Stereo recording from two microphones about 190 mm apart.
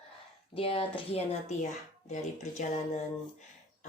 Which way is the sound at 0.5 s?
30° left (ahead or behind).